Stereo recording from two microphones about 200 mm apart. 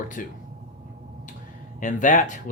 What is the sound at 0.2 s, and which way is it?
Speech, 40° left (ahead or behind).